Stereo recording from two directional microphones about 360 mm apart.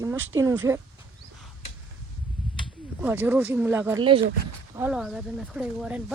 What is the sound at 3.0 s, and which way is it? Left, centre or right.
Speech, centre.